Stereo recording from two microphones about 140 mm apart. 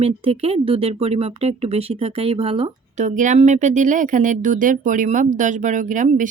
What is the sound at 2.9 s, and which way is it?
Speech, 60° right (ahead or behind).